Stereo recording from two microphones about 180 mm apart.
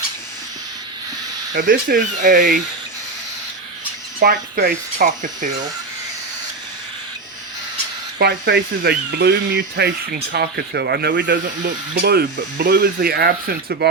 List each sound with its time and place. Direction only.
1.5 s speech: 50° right (ahead or behind)
4.2 s speech: 55° right (ahead or behind)
8.2 s speech: 60° right (ahead or behind)
11.4 s speech: 55° right (ahead or behind)